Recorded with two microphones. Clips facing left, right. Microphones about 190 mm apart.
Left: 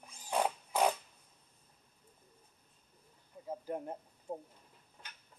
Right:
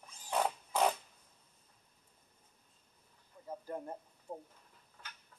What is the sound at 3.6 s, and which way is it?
Speech, 15° left (ahead or behind).